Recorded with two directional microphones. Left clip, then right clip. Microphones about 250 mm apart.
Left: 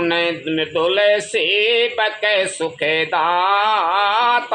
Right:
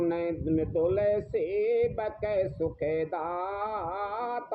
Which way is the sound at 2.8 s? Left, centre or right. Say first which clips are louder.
Left 12 dB; left.